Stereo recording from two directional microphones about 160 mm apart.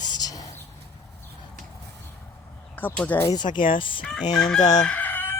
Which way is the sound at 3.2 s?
30° left (ahead or behind).